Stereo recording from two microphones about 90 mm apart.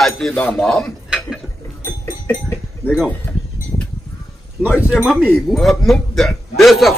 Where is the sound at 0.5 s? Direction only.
5° left (ahead or behind).